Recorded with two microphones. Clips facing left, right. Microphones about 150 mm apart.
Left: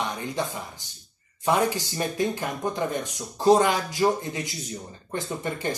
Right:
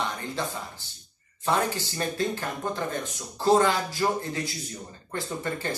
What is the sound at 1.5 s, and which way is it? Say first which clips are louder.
Speech: left 3 dB; 15° left (ahead or behind).